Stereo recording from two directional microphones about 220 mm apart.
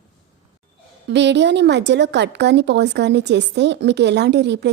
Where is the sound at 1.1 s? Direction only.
50° right (ahead or behind).